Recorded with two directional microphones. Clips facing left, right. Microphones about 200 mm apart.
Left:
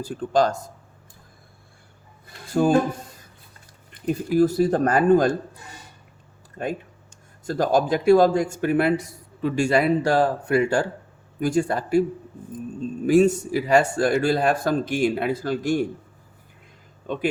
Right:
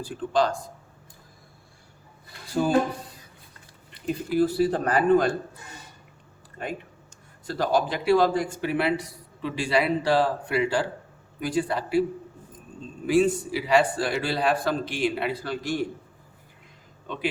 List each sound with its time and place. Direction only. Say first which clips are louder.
0.0 s speech: left 3 dB; 45° left (ahead or behind)
2.5 s speech: left 5 dB; 50° left (ahead or behind)
3.9 s speech: left 4 dB; 45° left (ahead or behind)
7.4 s speech: left 3 dB; 45° left (ahead or behind)
13.1 s speech: left 4 dB; 45° left (ahead or behind)